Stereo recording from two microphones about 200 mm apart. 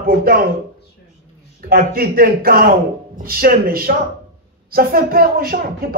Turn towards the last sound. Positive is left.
turn(degrees=-50)  # may be behind; listen again after turning